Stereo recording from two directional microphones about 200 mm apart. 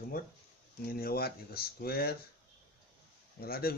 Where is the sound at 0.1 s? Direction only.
45° left (ahead or behind).